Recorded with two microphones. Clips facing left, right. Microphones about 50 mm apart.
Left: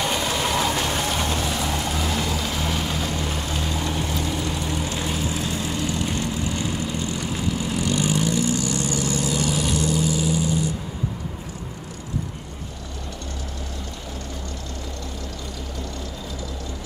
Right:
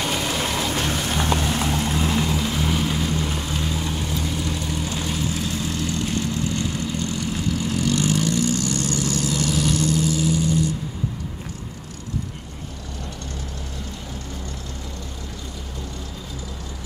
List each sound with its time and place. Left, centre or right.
0.3 s a sound: centre
0.7 s music: left
1.3 s vehicle: right
2.4 s vehicle: centre
3.1 s vehicle: centre
3.3 s vehicle: centre